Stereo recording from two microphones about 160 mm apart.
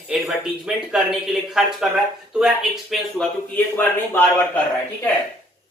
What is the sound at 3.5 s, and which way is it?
Speech, 10° left (ahead or behind).